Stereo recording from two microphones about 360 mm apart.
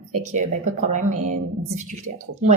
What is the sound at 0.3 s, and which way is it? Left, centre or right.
Speech, centre.